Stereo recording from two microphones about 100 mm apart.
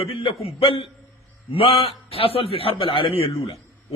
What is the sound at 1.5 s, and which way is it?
A man's voice, 75° left (ahead or behind).